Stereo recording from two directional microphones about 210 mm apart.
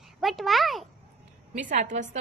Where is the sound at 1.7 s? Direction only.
35° right (ahead or behind).